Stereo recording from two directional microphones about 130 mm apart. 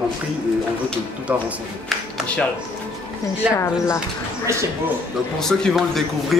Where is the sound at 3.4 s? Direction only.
10° right (ahead or behind).